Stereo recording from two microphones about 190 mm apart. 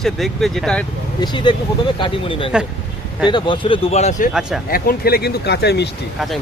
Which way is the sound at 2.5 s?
5° right (ahead or behind).